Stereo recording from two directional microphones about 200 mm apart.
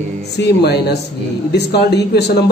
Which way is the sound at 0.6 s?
55° left (ahead or behind).